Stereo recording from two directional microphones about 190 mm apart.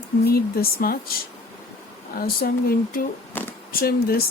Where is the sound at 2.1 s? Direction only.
50° left (ahead or behind).